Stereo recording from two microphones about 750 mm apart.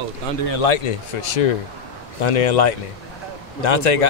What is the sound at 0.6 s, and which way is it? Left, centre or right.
A man's voice, left.